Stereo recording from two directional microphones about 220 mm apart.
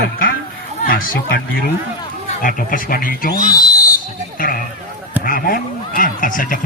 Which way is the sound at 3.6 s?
15° left (ahead or behind).